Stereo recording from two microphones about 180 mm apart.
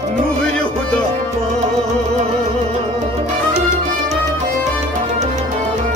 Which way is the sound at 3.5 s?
40° right (ahead or behind).